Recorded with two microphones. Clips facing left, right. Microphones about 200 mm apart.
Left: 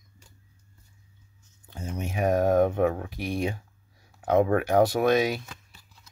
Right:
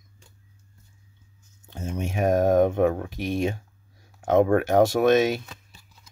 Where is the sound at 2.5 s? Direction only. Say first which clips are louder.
Right 2 dB; 20° right (ahead or behind).